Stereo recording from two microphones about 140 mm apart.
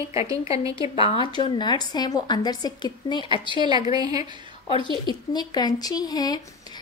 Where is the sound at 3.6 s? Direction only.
30° right (ahead or behind).